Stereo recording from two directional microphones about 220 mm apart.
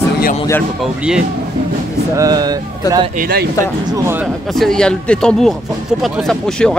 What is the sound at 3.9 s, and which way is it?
Speech, 10° right (ahead or behind).